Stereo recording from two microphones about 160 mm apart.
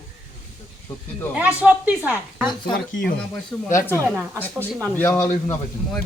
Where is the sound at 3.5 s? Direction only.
20° left (ahead or behind).